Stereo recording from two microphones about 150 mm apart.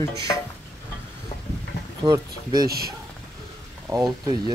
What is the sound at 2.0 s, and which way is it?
Speech, 25° right (ahead or behind).